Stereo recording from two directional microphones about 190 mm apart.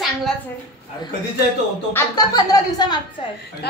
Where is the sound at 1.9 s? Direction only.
15° left (ahead or behind).